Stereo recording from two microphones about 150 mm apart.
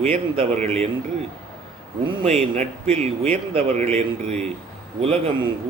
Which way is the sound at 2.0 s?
40° right (ahead or behind).